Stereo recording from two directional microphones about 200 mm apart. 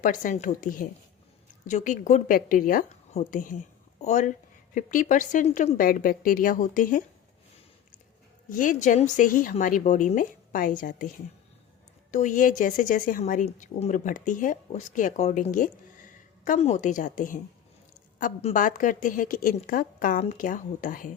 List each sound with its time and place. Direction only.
0.0 s a woman's voice: 40° left (ahead or behind)
8.4 s a woman's voice: 40° left (ahead or behind)
12.1 s a woman's voice: 40° left (ahead or behind)